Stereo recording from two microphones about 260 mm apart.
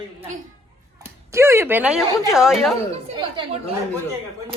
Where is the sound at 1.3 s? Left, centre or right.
Centre.